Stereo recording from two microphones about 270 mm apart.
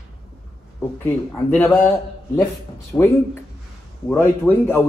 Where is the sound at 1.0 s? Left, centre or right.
Centre.